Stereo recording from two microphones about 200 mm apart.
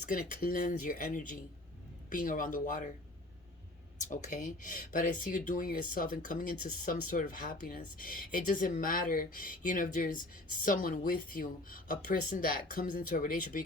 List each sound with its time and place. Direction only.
0.0 s speech: 45° left (ahead or behind)
4.1 s speech: 40° left (ahead or behind)